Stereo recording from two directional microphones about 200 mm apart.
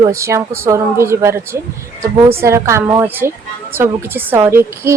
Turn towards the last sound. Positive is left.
turn(degrees=-10)  # may be behind; listen again after turning